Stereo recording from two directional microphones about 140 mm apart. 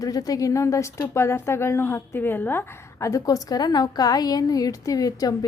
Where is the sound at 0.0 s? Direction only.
25° left (ahead or behind).